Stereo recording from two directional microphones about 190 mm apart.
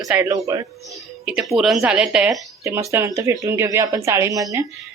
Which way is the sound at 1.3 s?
5° right (ahead or behind).